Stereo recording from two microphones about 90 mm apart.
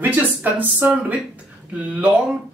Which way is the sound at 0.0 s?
20° right (ahead or behind).